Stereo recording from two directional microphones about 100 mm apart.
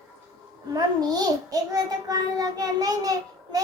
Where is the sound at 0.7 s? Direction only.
40° right (ahead or behind).